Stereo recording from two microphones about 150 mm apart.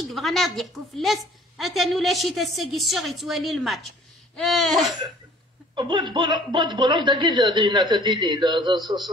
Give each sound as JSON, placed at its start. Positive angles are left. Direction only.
{"t": 0.0, "sound": "a woman's voice", "side_deg": 0}
{"t": 5.8, "sound": "speech", "side_deg": -30}